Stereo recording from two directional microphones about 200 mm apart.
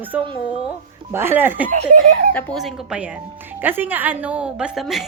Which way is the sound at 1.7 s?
40° right (ahead or behind).